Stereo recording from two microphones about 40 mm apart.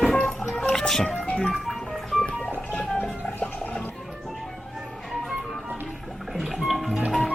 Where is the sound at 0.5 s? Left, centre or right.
Left.